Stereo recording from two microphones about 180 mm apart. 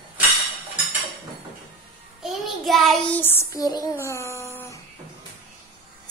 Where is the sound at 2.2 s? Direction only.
Centre (ahead or behind).